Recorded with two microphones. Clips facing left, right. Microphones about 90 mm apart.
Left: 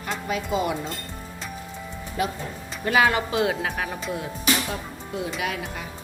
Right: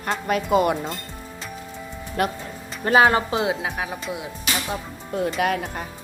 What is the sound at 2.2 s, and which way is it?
Speech, 60° right (ahead or behind).